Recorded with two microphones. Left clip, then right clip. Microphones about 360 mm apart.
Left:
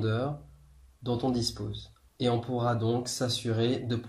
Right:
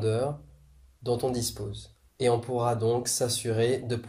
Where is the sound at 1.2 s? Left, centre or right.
Centre.